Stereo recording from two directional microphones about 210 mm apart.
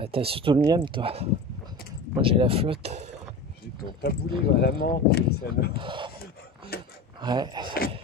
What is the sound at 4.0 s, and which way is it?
Speech, 50° left (ahead or behind).